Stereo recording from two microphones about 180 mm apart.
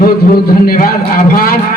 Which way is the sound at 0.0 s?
55° left (ahead or behind).